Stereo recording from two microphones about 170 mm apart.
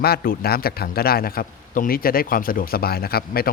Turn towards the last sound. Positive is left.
turn(degrees=65)  # may be behind; listen again after turning